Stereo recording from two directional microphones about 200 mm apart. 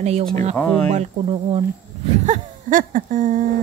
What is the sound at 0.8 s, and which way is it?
Speech, 35° right (ahead or behind).